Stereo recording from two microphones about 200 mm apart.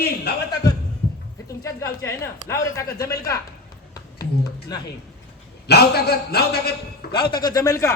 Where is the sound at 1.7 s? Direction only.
15° left (ahead or behind).